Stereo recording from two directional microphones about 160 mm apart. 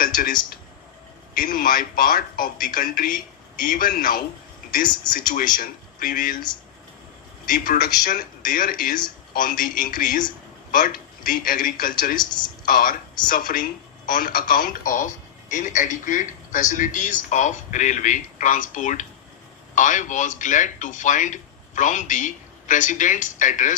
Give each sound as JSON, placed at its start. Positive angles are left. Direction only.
{"t": 1.3, "sound": "a man's voice", "side_deg": 60}
{"t": 7.4, "sound": "a man's voice", "side_deg": 60}
{"t": 12.1, "sound": "a man's voice", "side_deg": 25}
{"t": 12.6, "sound": "a man's voice", "side_deg": 60}